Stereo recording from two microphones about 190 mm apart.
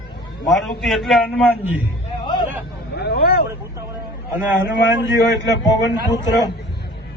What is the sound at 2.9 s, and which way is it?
Vehicle, 60° left (ahead or behind).